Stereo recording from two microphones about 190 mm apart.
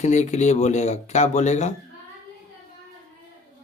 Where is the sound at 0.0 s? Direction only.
40° left (ahead or behind).